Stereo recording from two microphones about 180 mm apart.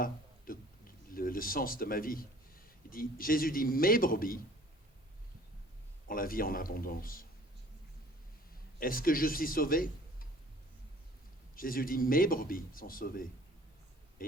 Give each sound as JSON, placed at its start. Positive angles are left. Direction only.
{"t": 0.0, "sound": "a sound", "side_deg": 50}
{"t": 1.1, "sound": "speech", "side_deg": 50}
{"t": 6.1, "sound": "speech", "side_deg": 50}
{"t": 8.8, "sound": "speech", "side_deg": 50}
{"t": 11.5, "sound": "speech", "side_deg": 50}
{"t": 14.2, "sound": "a sound", "side_deg": 50}